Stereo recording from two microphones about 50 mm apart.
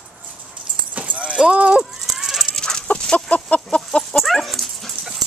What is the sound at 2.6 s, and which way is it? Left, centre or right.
Chicken, centre.